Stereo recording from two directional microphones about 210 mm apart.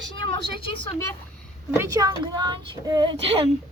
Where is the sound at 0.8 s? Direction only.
15° left (ahead or behind).